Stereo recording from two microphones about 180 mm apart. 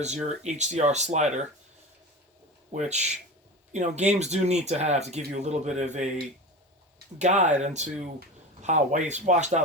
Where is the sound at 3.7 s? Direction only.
40° right (ahead or behind).